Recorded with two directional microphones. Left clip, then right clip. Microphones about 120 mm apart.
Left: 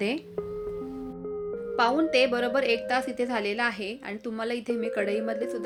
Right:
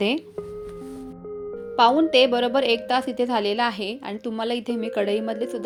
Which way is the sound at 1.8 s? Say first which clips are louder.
Right 6 dB; 40° right (ahead or behind).